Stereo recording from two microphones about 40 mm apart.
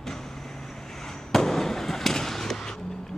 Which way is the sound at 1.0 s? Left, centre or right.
Centre.